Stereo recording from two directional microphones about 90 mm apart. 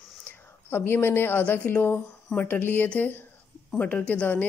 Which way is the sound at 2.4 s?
20° left (ahead or behind).